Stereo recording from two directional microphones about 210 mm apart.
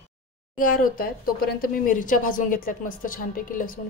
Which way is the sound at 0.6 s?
40° left (ahead or behind).